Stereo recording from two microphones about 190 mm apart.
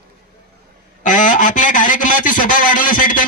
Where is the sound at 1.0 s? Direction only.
45° left (ahead or behind).